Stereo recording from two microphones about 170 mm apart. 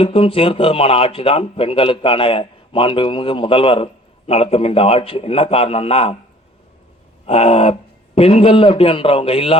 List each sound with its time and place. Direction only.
0.0 s speech: 35° left (ahead or behind)
7.3 s speech: 35° left (ahead or behind)